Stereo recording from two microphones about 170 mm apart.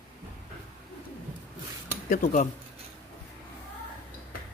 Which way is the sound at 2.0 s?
50° left (ahead or behind).